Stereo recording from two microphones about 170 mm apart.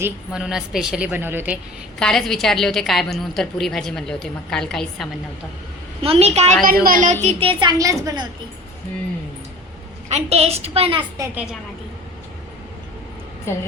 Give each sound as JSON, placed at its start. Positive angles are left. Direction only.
{"t": 0.0, "sound": "a woman's voice", "side_deg": -5}
{"t": 2.0, "sound": "a woman's voice", "side_deg": 5}
{"t": 6.0, "sound": "a woman's voice", "side_deg": -35}
{"t": 6.8, "sound": "a woman's voice", "side_deg": -50}
{"t": 10.1, "sound": "a woman's voice", "side_deg": -40}
{"t": 13.5, "sound": "a woman's voice", "side_deg": 15}